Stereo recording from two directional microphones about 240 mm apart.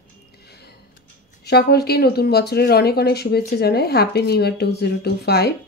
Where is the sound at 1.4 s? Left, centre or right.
Left.